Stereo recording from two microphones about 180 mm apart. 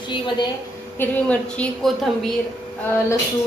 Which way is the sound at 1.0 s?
10° left (ahead or behind).